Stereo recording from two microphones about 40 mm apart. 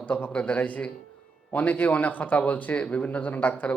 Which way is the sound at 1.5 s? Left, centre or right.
Left.